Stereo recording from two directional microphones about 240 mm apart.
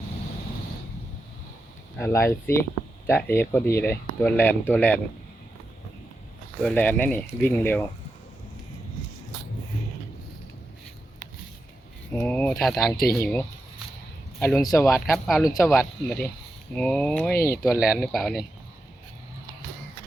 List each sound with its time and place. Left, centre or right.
2.0 s speech: centre
6.6 s speech: centre
12.1 s speech: centre
14.8 s speech: centre
17.3 s speech: left
17.6 s speech: centre